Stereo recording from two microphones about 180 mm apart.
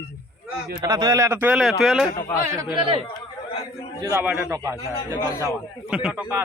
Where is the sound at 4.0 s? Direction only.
20° right (ahead or behind).